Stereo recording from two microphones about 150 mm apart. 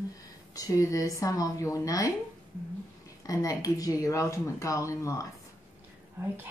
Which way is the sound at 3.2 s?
25° left (ahead or behind).